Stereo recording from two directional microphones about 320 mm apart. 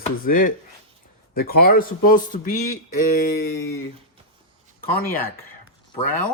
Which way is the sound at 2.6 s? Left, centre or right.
Left.